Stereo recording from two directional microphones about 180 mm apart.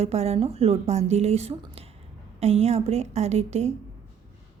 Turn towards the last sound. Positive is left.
turn(degrees=-40)  # may be behind; listen again after turning